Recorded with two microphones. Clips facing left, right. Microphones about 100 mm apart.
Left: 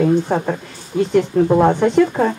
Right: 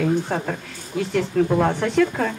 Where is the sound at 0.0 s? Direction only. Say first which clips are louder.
Left 6 dB; 20° left (ahead or behind).